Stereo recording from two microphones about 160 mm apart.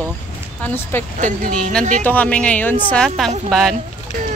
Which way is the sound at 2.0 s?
10° left (ahead or behind).